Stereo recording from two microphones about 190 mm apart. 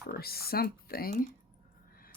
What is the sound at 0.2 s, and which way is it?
Speech, 55° left (ahead or behind).